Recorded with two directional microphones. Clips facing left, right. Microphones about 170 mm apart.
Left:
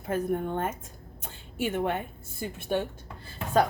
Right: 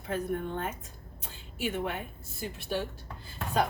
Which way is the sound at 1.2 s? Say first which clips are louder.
Left 3 dB; 50° left (ahead or behind).